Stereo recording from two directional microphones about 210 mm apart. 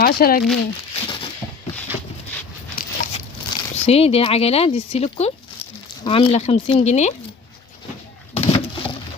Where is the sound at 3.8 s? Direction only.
30° left (ahead or behind).